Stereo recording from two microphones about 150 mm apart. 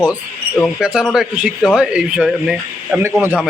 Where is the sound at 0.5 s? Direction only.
Centre (ahead or behind).